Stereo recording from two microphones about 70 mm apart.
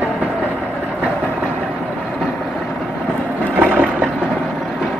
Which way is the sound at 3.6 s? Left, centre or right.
Centre.